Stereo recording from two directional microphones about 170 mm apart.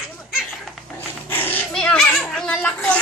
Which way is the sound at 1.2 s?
10° left (ahead or behind).